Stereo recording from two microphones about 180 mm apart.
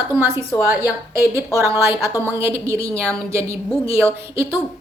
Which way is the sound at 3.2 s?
15° right (ahead or behind).